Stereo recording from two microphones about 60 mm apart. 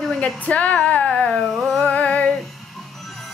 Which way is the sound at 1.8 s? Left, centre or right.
Left.